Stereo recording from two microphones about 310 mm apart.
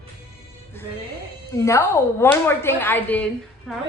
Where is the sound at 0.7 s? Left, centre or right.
Centre.